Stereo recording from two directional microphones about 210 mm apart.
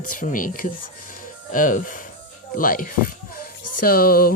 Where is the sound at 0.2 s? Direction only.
40° left (ahead or behind).